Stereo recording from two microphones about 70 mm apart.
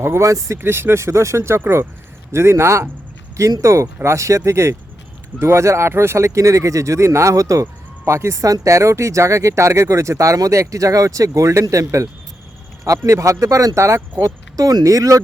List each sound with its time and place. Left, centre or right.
0.0 s speech: right
0.6 s speech: right